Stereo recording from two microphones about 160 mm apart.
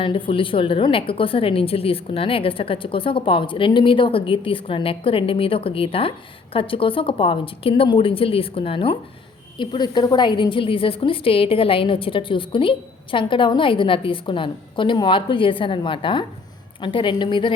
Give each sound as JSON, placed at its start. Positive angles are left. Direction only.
{"t": 0.0, "sound": "a woman's voice", "side_deg": 35}